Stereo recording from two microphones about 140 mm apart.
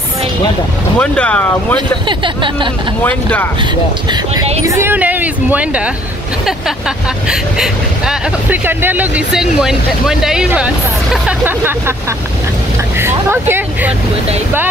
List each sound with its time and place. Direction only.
0.9 s speech: 10° left (ahead or behind)
1.8 s speech: 35° right (ahead or behind)
3.0 s speech: 10° left (ahead or behind)
4.6 s a sound: 15° right (ahead or behind)
7.2 s speech: 5° right (ahead or behind)
13.0 s speech: 15° right (ahead or behind)